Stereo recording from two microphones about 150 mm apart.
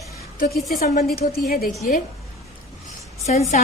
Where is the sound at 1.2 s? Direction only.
85° left.